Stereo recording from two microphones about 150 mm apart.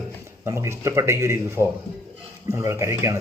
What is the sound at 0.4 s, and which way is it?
A man's voice, 20° right (ahead or behind).